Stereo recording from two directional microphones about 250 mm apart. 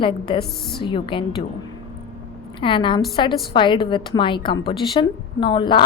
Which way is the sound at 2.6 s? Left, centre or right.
Centre.